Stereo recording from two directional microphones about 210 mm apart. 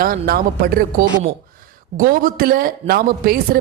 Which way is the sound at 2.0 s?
40° right (ahead or behind).